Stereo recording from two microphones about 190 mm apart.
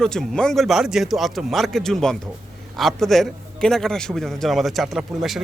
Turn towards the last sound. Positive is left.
turn(degrees=0)  # may be behind; listen again after turning